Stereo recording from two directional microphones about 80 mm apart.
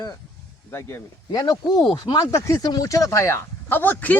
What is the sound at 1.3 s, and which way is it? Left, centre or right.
Speech, left.